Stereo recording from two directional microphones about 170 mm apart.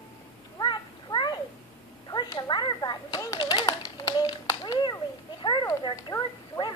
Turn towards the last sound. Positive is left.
turn(degrees=25)  # may be behind; listen again after turning